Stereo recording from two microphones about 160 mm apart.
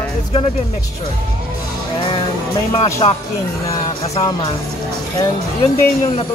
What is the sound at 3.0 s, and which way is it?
Speech, 35° left (ahead or behind).